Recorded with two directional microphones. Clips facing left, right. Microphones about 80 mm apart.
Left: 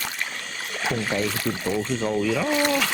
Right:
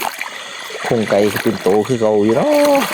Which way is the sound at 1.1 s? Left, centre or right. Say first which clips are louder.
Right 12 dB; right.